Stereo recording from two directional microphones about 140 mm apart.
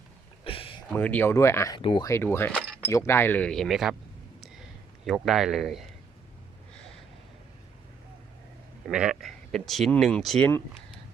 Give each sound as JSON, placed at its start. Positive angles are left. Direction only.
{"t": 0.4, "sound": "a sound", "side_deg": 40}
{"t": 0.9, "sound": "speech", "side_deg": 10}
{"t": 1.8, "sound": "speech", "side_deg": 40}
{"t": 2.0, "sound": "speech", "side_deg": 20}
{"t": 5.0, "sound": "speech", "side_deg": 0}
{"t": 8.9, "sound": "speech", "side_deg": -5}